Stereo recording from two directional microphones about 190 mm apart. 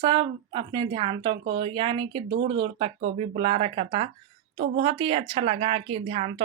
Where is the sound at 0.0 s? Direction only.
25° right (ahead or behind).